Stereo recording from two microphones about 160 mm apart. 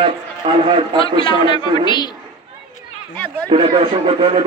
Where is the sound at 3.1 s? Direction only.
10° left (ahead or behind).